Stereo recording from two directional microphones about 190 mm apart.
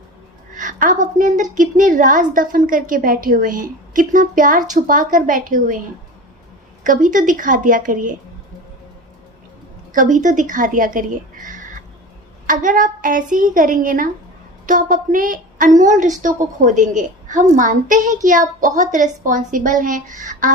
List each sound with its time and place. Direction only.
0.5 s a woman's voice: 45° right (ahead or behind)
6.8 s a woman's voice: 45° right (ahead or behind)
9.9 s a woman's voice: 45° right (ahead or behind)